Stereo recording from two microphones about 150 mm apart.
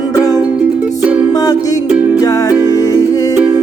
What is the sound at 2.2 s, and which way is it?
Music, 20° left (ahead or behind).